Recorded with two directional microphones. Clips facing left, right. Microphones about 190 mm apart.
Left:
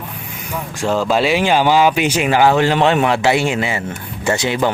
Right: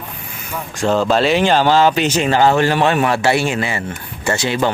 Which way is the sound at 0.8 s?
10° left (ahead or behind).